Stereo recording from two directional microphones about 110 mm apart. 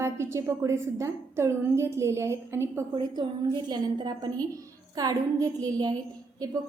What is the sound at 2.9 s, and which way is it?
A woman's voice, 40° right (ahead or behind).